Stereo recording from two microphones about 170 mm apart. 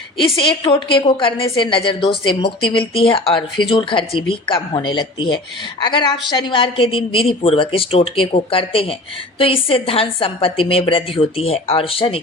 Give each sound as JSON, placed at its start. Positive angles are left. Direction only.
{"t": 0.3, "sound": "a woman's voice", "side_deg": 30}